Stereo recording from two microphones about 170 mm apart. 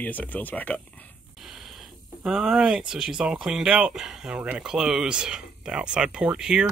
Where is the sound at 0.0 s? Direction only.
10° left (ahead or behind).